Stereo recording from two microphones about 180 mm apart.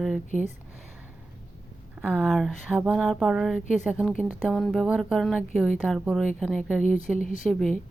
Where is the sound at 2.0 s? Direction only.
5° right (ahead or behind).